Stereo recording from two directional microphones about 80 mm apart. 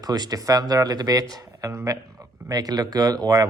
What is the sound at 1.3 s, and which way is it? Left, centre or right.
Speech, right.